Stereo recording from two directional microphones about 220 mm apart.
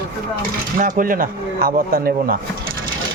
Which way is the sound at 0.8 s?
40° right (ahead or behind).